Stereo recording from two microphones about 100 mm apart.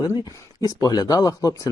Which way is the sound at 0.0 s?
35° left (ahead or behind).